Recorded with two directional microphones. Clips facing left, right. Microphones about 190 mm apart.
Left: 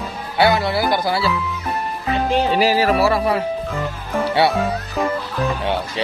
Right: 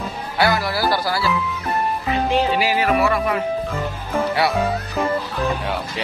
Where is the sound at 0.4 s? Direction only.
25° left (ahead or behind).